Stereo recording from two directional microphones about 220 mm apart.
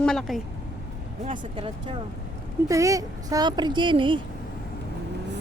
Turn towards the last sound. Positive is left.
turn(degrees=-20)  # may be behind; listen again after turning